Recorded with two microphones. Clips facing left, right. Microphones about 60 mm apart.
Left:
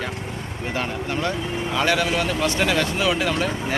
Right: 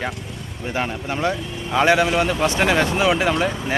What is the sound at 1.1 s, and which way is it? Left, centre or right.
Speech, centre.